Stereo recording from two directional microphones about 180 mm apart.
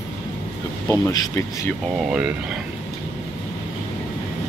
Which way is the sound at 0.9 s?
15° left (ahead or behind).